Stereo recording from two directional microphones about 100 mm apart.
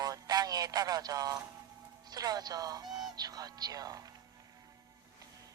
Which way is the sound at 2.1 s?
40° right (ahead or behind).